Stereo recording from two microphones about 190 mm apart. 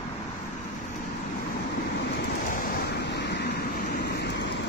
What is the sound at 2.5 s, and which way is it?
Vehicle, 50° left (ahead or behind).